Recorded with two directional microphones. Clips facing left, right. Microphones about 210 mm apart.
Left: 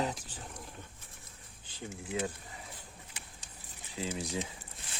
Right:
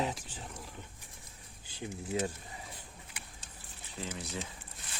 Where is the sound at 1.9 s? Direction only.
40° right (ahead or behind).